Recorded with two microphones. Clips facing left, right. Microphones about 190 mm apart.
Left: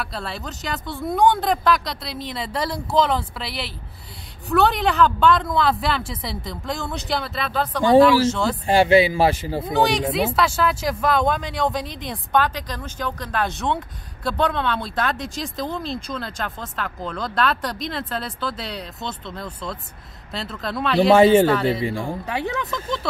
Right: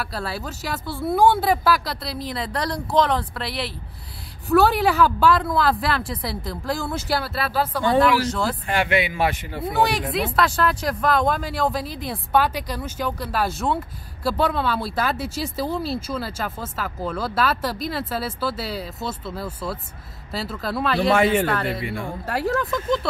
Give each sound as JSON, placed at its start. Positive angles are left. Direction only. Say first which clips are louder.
{"t": 0.0, "sound": "speech", "louder": "right 1 dB", "side_deg": -5}
{"t": 8.6, "sound": "speech", "louder": "left 10 dB", "side_deg": 30}
{"t": 9.7, "sound": "speech", "louder": "left 2 dB", "side_deg": -5}
{"t": 21.1, "sound": "a man's voice", "louder": "left 7 dB", "side_deg": 25}
{"t": 22.2, "sound": "speech", "louder": "right 2 dB", "side_deg": 0}